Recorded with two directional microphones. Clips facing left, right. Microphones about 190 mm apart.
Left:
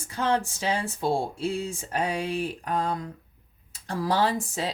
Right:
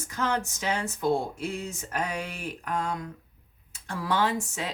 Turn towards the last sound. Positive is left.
turn(degrees=35)  # may be behind; listen again after turning